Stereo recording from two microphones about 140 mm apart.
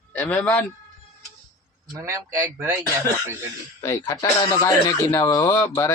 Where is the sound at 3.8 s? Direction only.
25° left (ahead or behind).